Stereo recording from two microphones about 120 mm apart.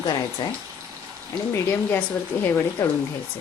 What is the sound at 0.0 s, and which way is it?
Speech, 40° left (ahead or behind).